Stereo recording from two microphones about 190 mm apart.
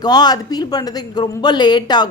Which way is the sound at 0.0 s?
20° left (ahead or behind).